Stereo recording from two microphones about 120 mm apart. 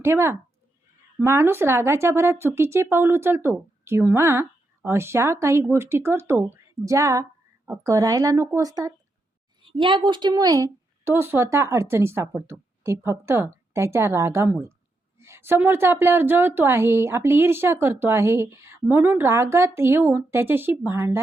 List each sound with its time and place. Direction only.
0.0 s a woman's voice: 20° right (ahead or behind)
9.7 s a woman's voice: 40° right (ahead or behind)
11.0 s a woman's voice: 20° right (ahead or behind)